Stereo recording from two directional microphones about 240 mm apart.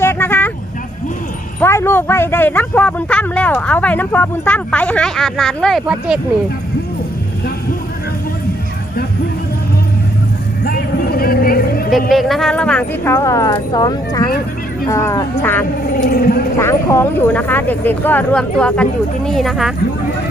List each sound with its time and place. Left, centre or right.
0.0 s vehicle: centre
1.6 s speech: centre
10.6 s a sound: left
12.1 s speech: centre
16.0 s speech: left
16.6 s speech: centre